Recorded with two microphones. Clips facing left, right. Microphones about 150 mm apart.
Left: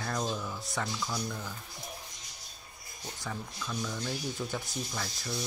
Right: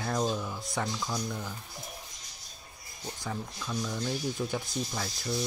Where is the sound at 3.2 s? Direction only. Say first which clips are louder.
Right 2 dB; 10° right (ahead or behind).